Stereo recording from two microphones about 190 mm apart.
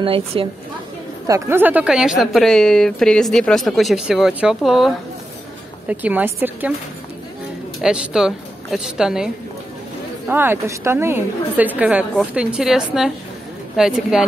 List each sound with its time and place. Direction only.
0.0 s a woman's voice: 30° right (ahead or behind)
1.2 s a woman's voice: 15° right (ahead or behind)
7.8 s a woman's voice: 5° right (ahead or behind)